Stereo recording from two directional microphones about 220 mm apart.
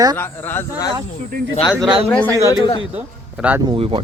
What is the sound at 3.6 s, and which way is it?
Speech, 25° right (ahead or behind).